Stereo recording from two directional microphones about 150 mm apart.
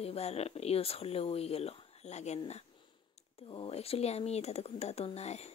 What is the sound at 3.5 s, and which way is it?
Speech, 40° left (ahead or behind).